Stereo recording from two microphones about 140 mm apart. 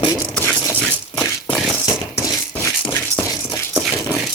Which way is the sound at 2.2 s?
20° left (ahead or behind).